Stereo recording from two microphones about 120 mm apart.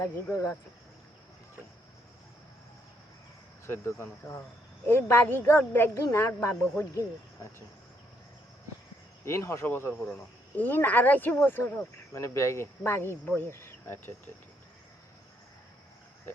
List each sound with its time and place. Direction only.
0.0 s speech: 25° left (ahead or behind)
3.7 s speech: 20° left (ahead or behind)
9.2 s speech: 25° left (ahead or behind)